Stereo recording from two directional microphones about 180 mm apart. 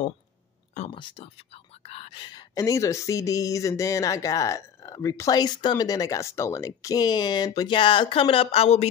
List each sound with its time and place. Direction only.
0.7 s speech: 30° left (ahead or behind)